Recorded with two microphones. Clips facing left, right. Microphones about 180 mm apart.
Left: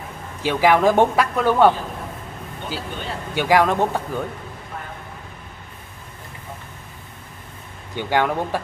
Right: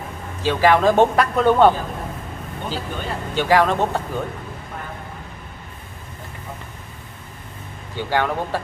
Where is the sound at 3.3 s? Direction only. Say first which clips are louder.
Even; 10° left (ahead or behind).